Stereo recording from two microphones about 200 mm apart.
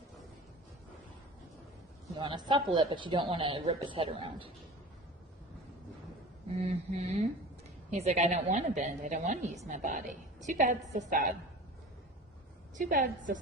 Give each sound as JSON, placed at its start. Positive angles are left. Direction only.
{"t": 2.1, "sound": "speech", "side_deg": -25}
{"t": 6.6, "sound": "a woman's voice", "side_deg": -35}
{"t": 12.7, "sound": "a woman's voice", "side_deg": -40}